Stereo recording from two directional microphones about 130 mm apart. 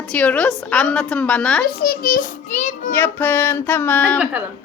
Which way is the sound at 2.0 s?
85° left.